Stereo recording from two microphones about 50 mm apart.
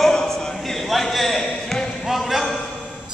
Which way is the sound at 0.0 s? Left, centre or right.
Centre.